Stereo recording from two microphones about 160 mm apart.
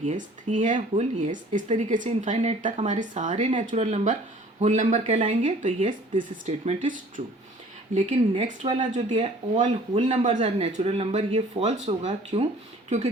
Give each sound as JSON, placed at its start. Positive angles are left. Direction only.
{"t": 0.0, "sound": "speech", "side_deg": -50}
{"t": 7.9, "sound": "speech", "side_deg": -40}